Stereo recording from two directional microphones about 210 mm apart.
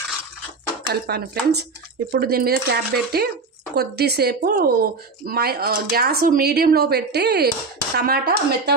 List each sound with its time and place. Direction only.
1.0 s speech: 50° right (ahead or behind)